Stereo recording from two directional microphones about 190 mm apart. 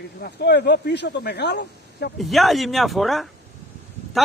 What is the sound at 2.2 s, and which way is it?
Speech, centre (ahead or behind).